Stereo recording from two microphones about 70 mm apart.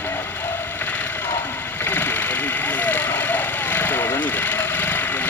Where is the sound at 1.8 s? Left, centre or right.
Left.